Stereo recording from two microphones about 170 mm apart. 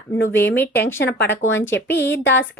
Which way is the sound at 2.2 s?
90° left.